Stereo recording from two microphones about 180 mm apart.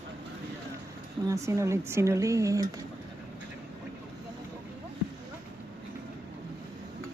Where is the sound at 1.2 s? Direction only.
15° right (ahead or behind).